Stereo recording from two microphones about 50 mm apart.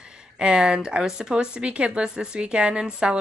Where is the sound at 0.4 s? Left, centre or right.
Centre.